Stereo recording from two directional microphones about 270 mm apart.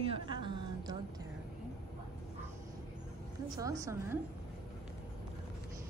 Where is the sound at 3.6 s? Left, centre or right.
Centre.